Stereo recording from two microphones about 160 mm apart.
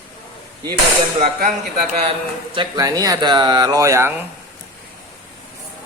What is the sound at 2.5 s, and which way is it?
Speech, 25° right (ahead or behind).